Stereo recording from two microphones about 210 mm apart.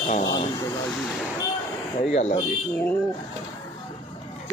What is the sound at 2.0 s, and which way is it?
Speech, 30° left (ahead or behind).